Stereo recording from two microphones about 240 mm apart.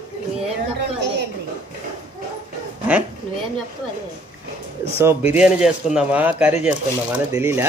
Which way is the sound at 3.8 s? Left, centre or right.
Centre.